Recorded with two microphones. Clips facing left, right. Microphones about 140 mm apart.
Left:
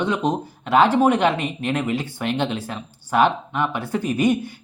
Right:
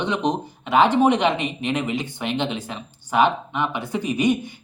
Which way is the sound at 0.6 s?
15° right (ahead or behind).